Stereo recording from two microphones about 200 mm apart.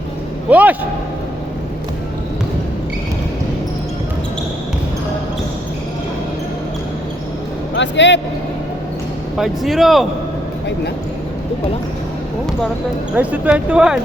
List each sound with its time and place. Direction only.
0.5 s a man's voice: 10° right (ahead or behind)
7.8 s speech: 65° left (ahead or behind)
9.4 s speech: centre (ahead or behind)
13.1 s speech: 5° right (ahead or behind)